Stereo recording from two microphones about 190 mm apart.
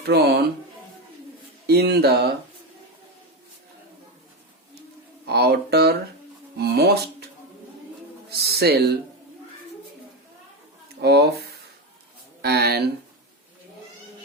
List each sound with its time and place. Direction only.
0.0 s speech: 60° right (ahead or behind)
1.6 s speech: 55° right (ahead or behind)
5.2 s speech: 55° right (ahead or behind)
8.3 s a sound: 55° right (ahead or behind)
11.0 s speech: 60° right (ahead or behind)
12.4 s speech: 55° right (ahead or behind)